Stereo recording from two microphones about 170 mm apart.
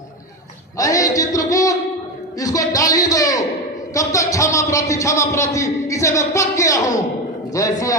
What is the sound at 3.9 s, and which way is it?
A man's voice, 20° left (ahead or behind).